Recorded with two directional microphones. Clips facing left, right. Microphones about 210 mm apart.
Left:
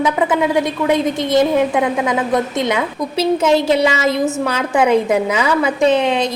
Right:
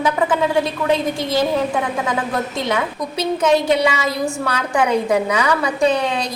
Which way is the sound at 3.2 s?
25° left (ahead or behind).